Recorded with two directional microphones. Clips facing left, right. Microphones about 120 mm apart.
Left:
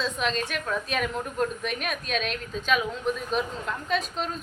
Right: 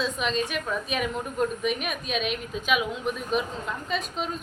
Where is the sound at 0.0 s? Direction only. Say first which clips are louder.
Right 1 dB; centre (ahead or behind).